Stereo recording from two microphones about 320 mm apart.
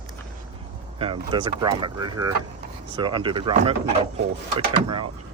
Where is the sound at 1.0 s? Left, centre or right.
Centre.